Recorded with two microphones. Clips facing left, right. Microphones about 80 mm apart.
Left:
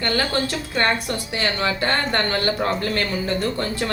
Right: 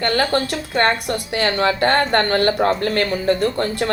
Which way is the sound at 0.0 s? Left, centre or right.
Right.